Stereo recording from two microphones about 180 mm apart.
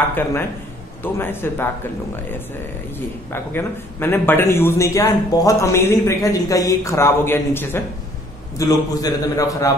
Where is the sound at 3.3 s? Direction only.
10° left (ahead or behind).